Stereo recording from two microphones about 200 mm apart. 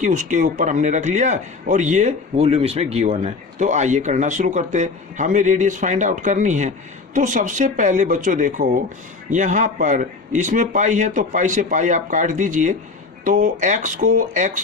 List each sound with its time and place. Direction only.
0.0 s speech: 40° right (ahead or behind)